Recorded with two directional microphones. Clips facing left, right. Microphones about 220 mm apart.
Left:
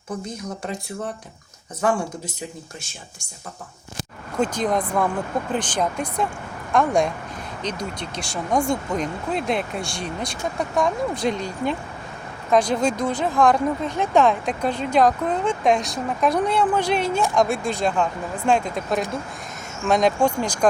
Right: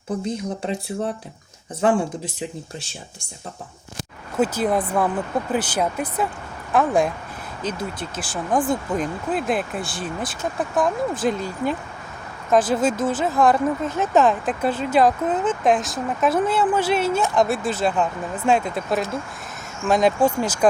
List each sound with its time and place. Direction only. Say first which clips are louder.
0.3 s speech: right 5 dB; 30° right (ahead or behind)
1.8 s speech: right 3 dB; 30° right (ahead or behind)
4.4 s speech: right 2 dB; 5° right (ahead or behind)